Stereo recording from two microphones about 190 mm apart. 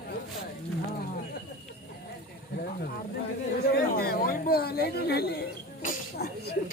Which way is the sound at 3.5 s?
55° left (ahead or behind).